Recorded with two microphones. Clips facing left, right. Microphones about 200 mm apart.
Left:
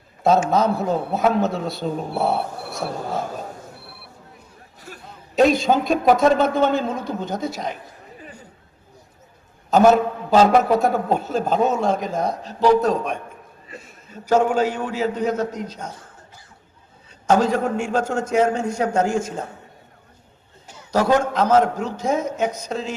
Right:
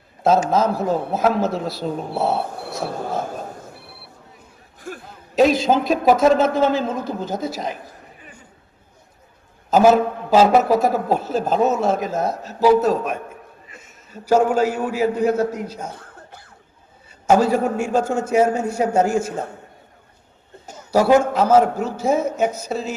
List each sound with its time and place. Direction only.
0.5 s a man's voice: centre (ahead or behind)
4.8 s a sound: 50° right (ahead or behind)
5.0 s a man's voice: centre (ahead or behind)
9.6 s a man's voice: 5° right (ahead or behind)
13.7 s a sound: 35° left (ahead or behind)
14.1 s a man's voice: 10° right (ahead or behind)
17.1 s a man's voice: 10° right (ahead or behind)
20.9 s a man's voice: 10° right (ahead or behind)